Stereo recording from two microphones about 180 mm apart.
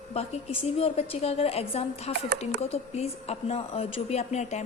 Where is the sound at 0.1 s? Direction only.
35° left (ahead or behind).